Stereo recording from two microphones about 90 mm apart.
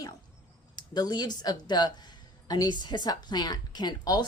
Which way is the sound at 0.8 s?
50° left (ahead or behind).